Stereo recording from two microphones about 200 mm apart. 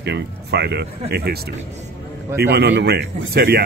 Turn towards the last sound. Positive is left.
turn(degrees=-50)  # may be behind; listen again after turning